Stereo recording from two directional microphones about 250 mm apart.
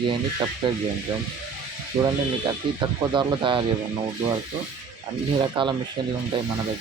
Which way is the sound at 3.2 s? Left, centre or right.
Centre.